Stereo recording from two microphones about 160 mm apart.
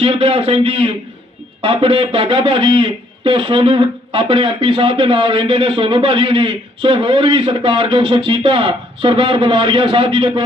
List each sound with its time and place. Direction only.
0.0 s speech: 35° right (ahead or behind)